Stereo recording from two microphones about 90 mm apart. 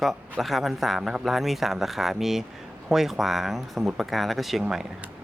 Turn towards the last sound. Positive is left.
turn(degrees=-5)  # may be behind; listen again after turning